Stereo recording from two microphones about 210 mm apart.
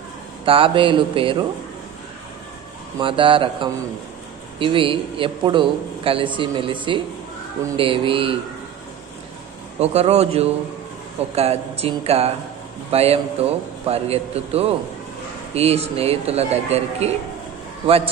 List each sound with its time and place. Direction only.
0.5 s a man's voice: 25° right (ahead or behind)
3.0 s a man's voice: 25° right (ahead or behind)
9.8 s a man's voice: 30° right (ahead or behind)